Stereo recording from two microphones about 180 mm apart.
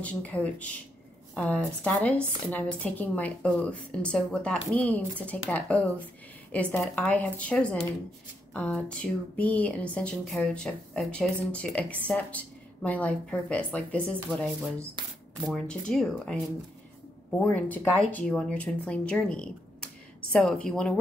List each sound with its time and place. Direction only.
0.0 s speech: 10° left (ahead or behind)
15.0 s speech: 25° right (ahead or behind)
15.4 s speech: centre (ahead or behind)
17.4 s speech: 5° left (ahead or behind)